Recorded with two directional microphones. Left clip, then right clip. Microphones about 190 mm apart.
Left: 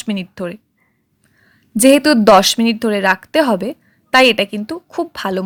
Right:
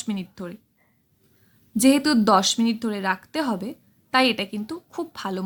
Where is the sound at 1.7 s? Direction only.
40° left (ahead or behind).